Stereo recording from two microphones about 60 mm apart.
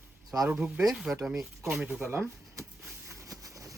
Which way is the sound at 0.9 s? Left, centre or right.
Centre.